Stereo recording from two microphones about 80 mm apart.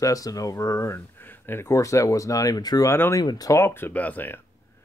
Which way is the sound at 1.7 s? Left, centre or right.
Left.